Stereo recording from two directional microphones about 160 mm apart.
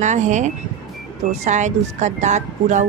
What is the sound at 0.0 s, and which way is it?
Speech, 50° right (ahead or behind).